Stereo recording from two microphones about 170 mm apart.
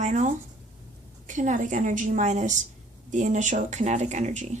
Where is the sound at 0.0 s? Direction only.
45° right (ahead or behind).